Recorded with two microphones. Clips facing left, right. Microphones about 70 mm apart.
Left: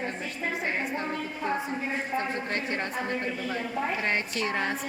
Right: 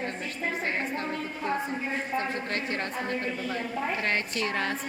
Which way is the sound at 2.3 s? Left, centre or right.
Left.